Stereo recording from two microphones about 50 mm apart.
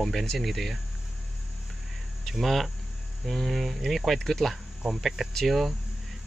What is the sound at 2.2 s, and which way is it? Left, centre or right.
Speech, centre.